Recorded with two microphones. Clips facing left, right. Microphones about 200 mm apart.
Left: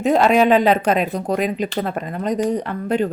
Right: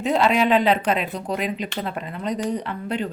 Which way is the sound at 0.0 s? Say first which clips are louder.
Left 5 dB; 45° left (ahead or behind).